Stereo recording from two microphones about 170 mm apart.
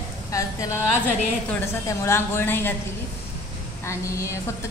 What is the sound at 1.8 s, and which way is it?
Speech, 15° left (ahead or behind).